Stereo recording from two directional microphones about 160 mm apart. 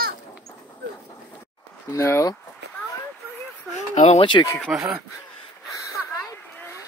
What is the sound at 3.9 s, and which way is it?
Speech, 45° left (ahead or behind).